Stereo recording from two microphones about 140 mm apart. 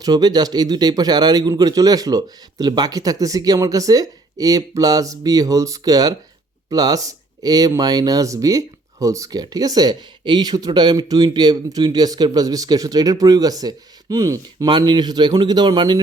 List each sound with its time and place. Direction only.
0.0 s speech: 30° right (ahead or behind)